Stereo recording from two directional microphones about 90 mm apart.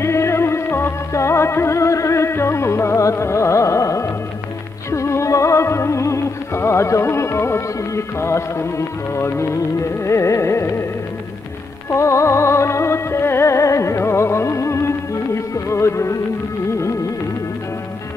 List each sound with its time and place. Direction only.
0.0 s music: 30° left (ahead or behind)
11.9 s music: 35° left (ahead or behind)